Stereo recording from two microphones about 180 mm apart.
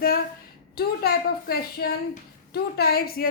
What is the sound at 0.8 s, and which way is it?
A woman's voice, 60° left (ahead or behind).